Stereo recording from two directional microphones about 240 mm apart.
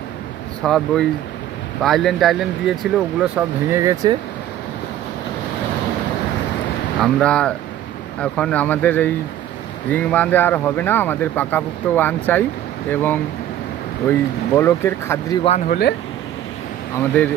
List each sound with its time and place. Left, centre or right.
0.6 s speech: centre
7.0 s speech: centre
15.4 s speech: left